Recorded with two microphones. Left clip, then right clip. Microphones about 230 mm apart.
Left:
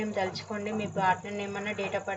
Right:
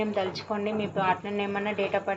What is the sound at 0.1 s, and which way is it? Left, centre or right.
Speech, right.